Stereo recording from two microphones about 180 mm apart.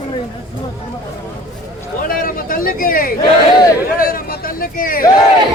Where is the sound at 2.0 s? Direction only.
50° left (ahead or behind).